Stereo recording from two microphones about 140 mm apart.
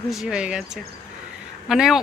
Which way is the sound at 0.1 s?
5° right (ahead or behind).